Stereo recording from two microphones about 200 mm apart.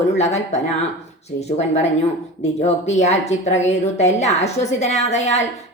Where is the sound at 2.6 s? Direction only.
35° left (ahead or behind).